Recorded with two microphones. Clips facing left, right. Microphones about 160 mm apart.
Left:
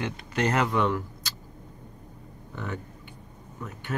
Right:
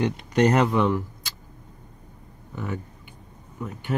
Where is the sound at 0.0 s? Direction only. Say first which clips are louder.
Right 7 dB; 15° right (ahead or behind).